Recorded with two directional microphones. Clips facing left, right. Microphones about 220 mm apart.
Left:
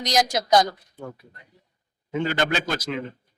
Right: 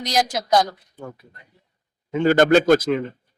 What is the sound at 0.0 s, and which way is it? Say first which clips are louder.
Speech: even; 5° right (ahead or behind).